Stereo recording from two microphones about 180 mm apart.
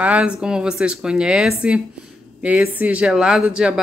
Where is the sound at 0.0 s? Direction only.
5° right (ahead or behind).